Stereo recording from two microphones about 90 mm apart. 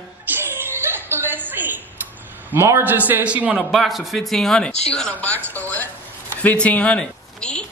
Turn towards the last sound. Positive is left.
turn(degrees=10)  # may be behind; listen again after turning